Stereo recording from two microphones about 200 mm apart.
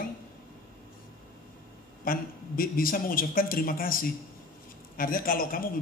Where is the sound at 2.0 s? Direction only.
45° left (ahead or behind).